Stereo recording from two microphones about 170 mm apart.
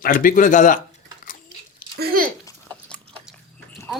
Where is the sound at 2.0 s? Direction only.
55° right (ahead or behind).